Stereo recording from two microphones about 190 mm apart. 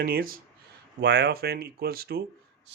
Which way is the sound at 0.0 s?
50° right (ahead or behind).